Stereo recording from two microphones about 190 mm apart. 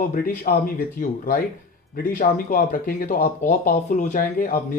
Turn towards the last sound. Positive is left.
turn(degrees=45)  # may be behind; listen again after turning